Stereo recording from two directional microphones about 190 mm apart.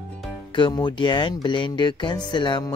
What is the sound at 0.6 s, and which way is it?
Speech, 25° left (ahead or behind).